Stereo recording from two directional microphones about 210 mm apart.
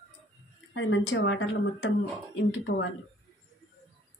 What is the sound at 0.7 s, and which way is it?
A woman's voice, 65° left (ahead or behind).